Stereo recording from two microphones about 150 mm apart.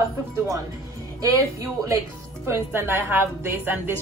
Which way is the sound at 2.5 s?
15° right (ahead or behind).